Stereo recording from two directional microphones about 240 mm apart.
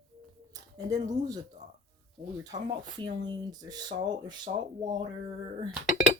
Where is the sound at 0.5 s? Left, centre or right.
Centre.